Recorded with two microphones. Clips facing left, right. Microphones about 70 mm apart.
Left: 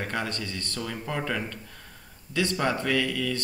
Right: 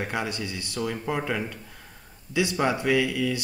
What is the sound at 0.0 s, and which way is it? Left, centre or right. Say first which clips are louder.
Speech: right 1 dB; centre.